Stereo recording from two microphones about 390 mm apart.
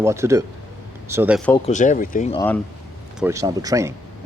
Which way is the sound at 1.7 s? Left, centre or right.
Centre.